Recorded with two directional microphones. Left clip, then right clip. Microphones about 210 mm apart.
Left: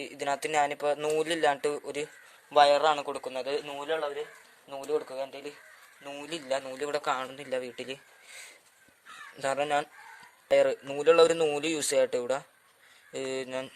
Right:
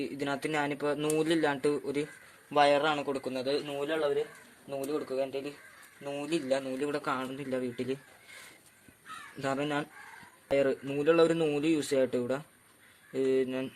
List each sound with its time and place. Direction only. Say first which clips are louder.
0.0 s a man's voice: left 2 dB; 30° left (ahead or behind)
9.4 s a man's voice: left 4 dB; 35° left (ahead or behind)